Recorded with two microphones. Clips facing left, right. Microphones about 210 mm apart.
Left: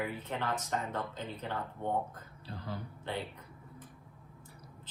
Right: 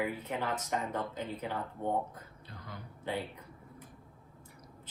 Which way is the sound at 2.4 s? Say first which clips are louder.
Left 8 dB; 30° left (ahead or behind).